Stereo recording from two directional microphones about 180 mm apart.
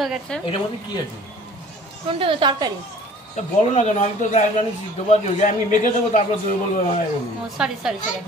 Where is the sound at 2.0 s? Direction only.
30° right (ahead or behind).